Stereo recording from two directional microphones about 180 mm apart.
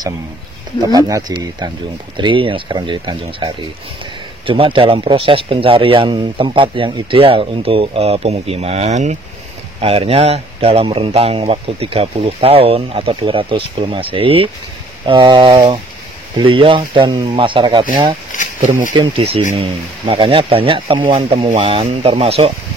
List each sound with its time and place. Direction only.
0.9 s speech: 20° right (ahead or behind)
18.6 s speech: 45° right (ahead or behind)
18.9 s speech: 30° right (ahead or behind)